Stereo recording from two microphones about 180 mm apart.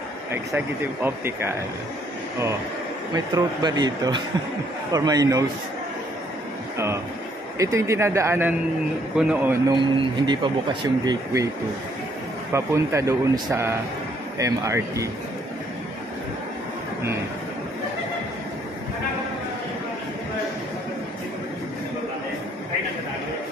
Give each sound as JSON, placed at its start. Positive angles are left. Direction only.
{"t": 1.0, "sound": "speech", "side_deg": -10}
{"t": 3.3, "sound": "speech", "side_deg": -20}
{"t": 7.5, "sound": "speech", "side_deg": -15}
{"t": 9.7, "sound": "speech", "side_deg": -25}
{"t": 12.5, "sound": "speech", "side_deg": -15}